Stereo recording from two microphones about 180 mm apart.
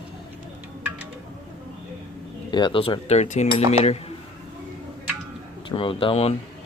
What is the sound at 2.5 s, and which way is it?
Cutlery, 25° left (ahead or behind).